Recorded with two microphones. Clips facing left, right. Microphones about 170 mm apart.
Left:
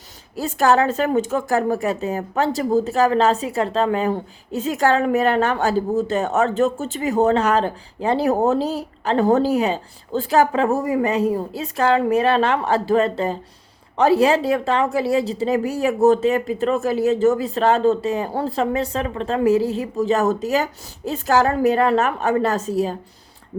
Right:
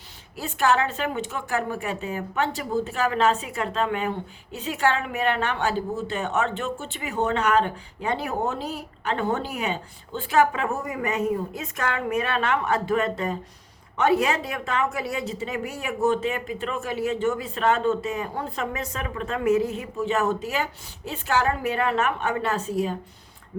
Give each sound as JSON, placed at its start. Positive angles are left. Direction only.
{"t": 0.3, "sound": "a woman's voice", "side_deg": 40}